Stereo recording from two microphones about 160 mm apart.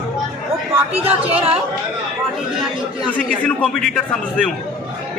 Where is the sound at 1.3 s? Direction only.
40° right (ahead or behind).